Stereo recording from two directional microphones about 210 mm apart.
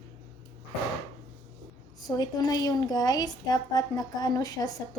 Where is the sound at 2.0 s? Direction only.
20° left (ahead or behind).